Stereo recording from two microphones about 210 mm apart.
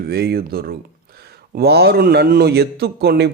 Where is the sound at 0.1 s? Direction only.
50° right (ahead or behind).